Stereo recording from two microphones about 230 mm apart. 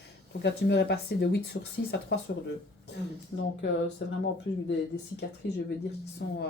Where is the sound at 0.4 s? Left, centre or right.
Left.